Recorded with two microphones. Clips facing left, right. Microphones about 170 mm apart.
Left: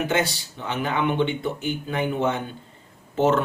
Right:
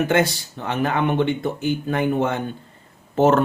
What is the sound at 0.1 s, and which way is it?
Speech, 50° right (ahead or behind).